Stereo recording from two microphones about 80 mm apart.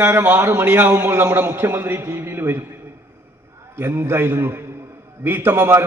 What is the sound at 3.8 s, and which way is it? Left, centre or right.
A man's voice, right.